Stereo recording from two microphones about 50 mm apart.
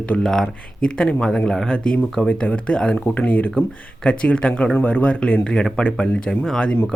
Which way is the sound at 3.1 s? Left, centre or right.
Left.